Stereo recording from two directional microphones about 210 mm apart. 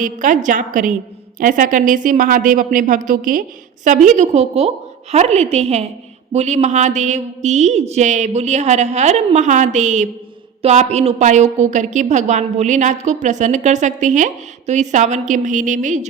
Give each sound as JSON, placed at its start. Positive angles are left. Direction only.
{"t": 0.0, "sound": "a woman's voice", "side_deg": -40}